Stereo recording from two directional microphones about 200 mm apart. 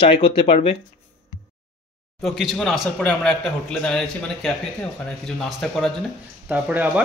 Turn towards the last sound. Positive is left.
turn(degrees=-5)  # may be behind; listen again after turning